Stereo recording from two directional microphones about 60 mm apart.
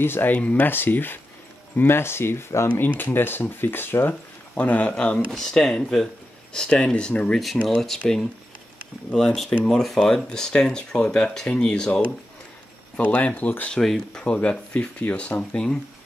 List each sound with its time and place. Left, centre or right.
0.0 s speech: left
0.3 s speech: left
0.7 s speech: left
3.0 s speech: left
4.6 s speech: left
7.6 s speech: centre
9.1 s speech: centre; by 13.7 s left
13.7 s speech: centre
14.2 s speech: centre